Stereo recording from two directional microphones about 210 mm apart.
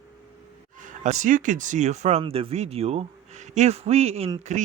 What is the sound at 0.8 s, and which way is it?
Speech, 35° right (ahead or behind).